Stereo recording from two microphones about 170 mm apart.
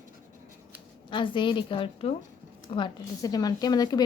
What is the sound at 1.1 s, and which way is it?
A woman's voice, 30° left (ahead or behind).